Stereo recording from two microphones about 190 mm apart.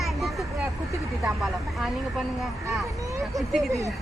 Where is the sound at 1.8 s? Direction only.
Centre (ahead or behind).